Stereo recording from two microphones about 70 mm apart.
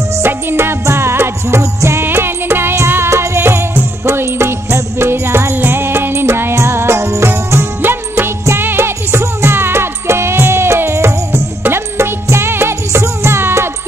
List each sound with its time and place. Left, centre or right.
0.2 s music: right
5.5 s music: right